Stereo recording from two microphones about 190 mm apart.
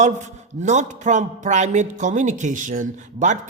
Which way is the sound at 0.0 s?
40° right (ahead or behind).